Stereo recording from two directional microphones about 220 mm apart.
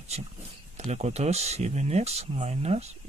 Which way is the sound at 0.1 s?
30° right (ahead or behind).